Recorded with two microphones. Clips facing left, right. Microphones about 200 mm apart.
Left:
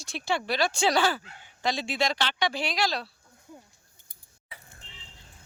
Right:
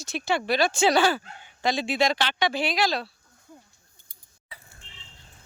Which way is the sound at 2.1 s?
55° right (ahead or behind).